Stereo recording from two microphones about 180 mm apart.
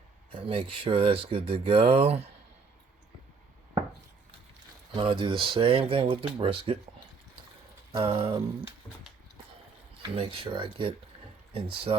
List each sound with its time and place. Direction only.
0.3 s speech: 30° right (ahead or behind)
4.9 s speech: 30° right (ahead or behind)
7.9 s speech: 25° right (ahead or behind)
10.2 s speech: 30° right (ahead or behind)